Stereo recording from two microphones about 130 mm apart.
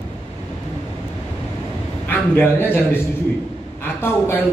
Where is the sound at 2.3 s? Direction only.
15° left (ahead or behind).